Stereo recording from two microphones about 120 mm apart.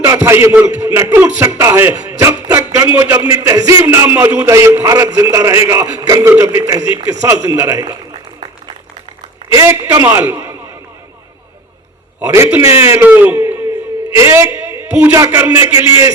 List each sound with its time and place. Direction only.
0.0 s a man's voice: 25° right (ahead or behind)
9.5 s a man's voice: 30° right (ahead or behind)
12.6 s speech: 20° right (ahead or behind)
14.1 s a sound: 20° right (ahead or behind)
15.1 s a man's voice: 25° right (ahead or behind)
15.8 s a man's voice: 45° left (ahead or behind)